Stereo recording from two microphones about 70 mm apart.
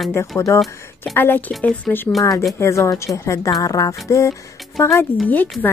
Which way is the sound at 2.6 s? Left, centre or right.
Left.